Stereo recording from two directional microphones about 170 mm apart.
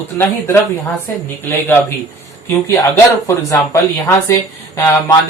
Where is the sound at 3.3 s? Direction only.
15° left (ahead or behind).